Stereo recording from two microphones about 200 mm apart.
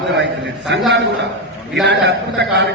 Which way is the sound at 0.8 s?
60° right (ahead or behind).